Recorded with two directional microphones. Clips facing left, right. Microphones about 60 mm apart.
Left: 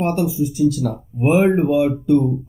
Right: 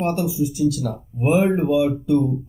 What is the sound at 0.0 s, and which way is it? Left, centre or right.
Speech, left.